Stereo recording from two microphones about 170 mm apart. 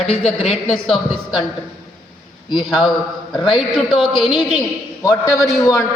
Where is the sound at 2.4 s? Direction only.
25° left (ahead or behind).